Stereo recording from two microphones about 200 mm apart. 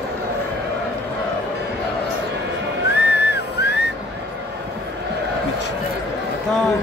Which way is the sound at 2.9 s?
55° left (ahead or behind).